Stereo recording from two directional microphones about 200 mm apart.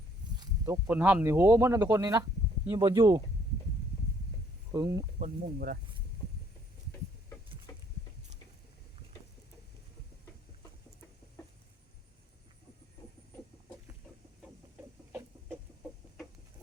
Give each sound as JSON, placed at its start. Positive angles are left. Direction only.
{"t": 0.3, "sound": "speech", "side_deg": -15}
{"t": 4.7, "sound": "speech", "side_deg": -15}
{"t": 5.2, "sound": "speech", "side_deg": -45}
{"t": 7.7, "sound": "a sound", "side_deg": 15}